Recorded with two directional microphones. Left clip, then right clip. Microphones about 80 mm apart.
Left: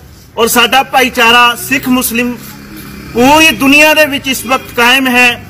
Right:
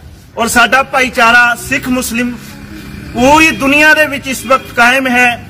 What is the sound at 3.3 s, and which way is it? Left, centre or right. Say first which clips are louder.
A man's voice: left 2 dB; right.